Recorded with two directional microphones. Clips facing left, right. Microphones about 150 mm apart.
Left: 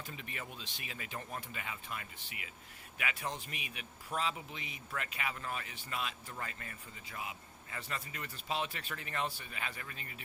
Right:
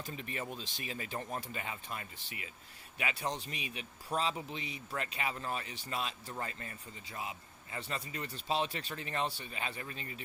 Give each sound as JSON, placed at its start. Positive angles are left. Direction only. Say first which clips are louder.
{"t": 0.2, "sound": "a man's voice", "louder": "right 5 dB", "side_deg": -35}